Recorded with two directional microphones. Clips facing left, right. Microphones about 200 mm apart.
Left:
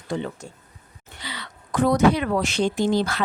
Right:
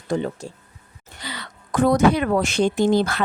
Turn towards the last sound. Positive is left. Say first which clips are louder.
# right 3 dB
turn(degrees=-55)  # may be behind; listen again after turning